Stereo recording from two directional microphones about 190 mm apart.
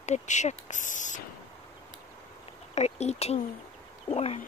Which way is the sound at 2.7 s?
35° left (ahead or behind).